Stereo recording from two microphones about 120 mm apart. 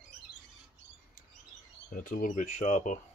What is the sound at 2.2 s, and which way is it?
Speech, 90° left.